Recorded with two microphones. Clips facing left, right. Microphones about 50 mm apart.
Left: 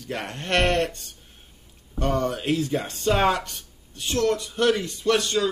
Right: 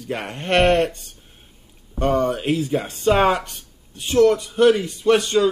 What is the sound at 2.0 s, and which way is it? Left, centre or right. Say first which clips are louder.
Speech: right 5 dB; centre.